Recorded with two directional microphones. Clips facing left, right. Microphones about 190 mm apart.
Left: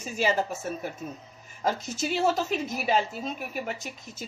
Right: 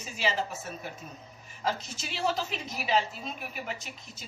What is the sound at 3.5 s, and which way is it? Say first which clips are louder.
Speech: left 5 dB; 45° left (ahead or behind).